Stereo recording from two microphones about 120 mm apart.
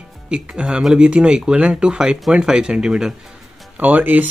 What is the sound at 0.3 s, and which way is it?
Speech, 5° right (ahead or behind).